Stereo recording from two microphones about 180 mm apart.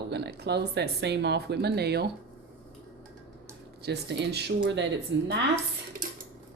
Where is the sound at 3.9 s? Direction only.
75° right (ahead or behind).